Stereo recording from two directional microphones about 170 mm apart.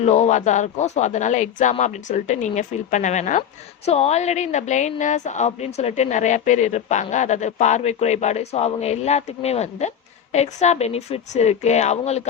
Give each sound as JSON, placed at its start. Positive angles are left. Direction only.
{"t": 0.0, "sound": "a woman's voice", "side_deg": 45}